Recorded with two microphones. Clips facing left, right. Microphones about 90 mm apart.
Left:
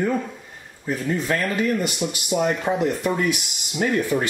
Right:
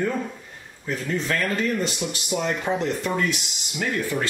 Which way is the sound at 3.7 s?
20° left (ahead or behind).